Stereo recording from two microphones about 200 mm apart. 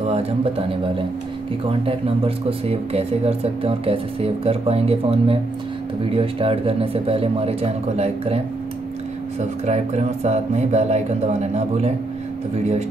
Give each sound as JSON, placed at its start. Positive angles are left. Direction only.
{"t": 0.0, "sound": "a man's voice", "side_deg": -30}
{"t": 9.4, "sound": "speech", "side_deg": -35}